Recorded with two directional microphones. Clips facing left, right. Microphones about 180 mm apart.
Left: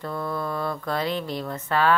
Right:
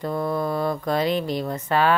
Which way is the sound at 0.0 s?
15° right (ahead or behind).